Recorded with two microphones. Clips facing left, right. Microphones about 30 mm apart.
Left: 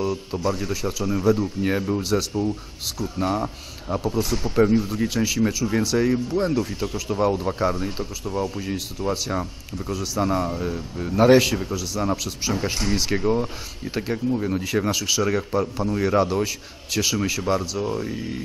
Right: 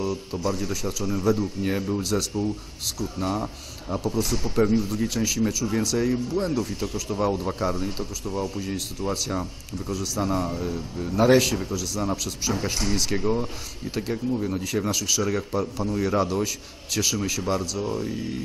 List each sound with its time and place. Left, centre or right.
0.0 s speech: centre